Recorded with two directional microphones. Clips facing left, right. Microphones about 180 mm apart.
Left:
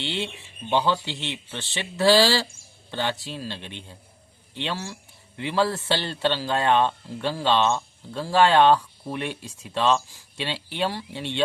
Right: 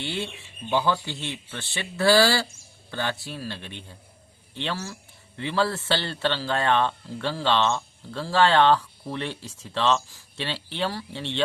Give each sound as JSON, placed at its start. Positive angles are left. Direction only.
{"t": 0.0, "sound": "a man's voice", "side_deg": 20}